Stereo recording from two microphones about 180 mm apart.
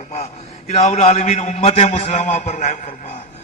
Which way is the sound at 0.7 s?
40° left (ahead or behind).